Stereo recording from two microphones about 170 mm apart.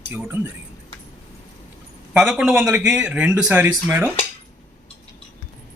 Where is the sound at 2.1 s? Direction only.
5° right (ahead or behind).